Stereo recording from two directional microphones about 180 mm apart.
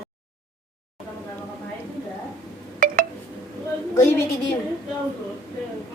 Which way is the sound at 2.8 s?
50° right (ahead or behind).